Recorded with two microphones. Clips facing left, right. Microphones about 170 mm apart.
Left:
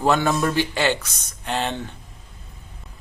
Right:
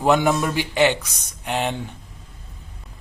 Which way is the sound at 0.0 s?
15° right (ahead or behind).